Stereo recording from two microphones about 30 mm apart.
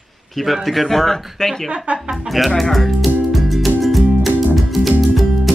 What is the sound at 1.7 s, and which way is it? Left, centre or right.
Speech, right.